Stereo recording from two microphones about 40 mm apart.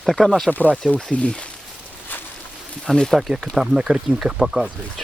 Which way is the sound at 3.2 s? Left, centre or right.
Centre.